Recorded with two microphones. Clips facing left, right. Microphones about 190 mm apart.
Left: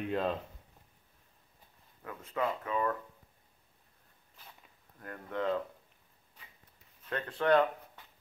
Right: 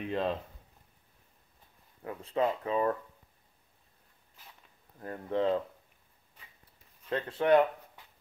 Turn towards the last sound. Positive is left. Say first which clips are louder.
# right 3 dB
turn(degrees=-20)  # may be behind; listen again after turning